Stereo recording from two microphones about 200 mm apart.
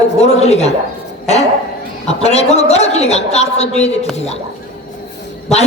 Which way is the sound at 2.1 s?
30° left (ahead or behind).